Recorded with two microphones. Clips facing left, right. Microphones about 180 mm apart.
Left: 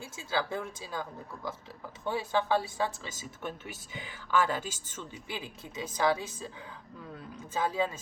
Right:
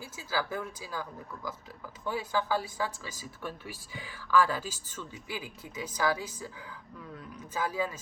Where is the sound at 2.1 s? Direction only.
25° left (ahead or behind).